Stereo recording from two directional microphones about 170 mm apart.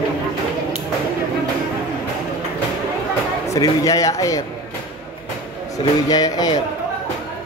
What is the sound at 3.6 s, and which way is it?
Speech, 20° left (ahead or behind).